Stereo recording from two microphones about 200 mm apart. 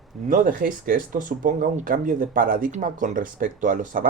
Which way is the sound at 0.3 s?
40° right (ahead or behind).